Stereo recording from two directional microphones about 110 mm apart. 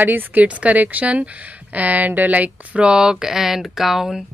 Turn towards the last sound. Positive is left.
turn(degrees=-5)  # may be behind; listen again after turning